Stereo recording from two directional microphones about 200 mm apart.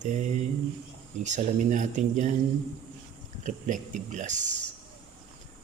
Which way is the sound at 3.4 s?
40° right (ahead or behind).